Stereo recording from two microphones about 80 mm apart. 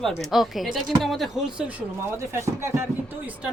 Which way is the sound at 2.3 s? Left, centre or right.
Right.